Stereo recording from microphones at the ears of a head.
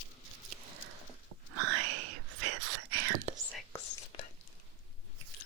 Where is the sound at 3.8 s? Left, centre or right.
Left.